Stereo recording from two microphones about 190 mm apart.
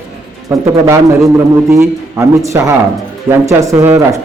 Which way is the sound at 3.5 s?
15° right (ahead or behind).